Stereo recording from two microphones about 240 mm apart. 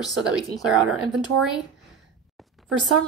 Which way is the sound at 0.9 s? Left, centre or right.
Right.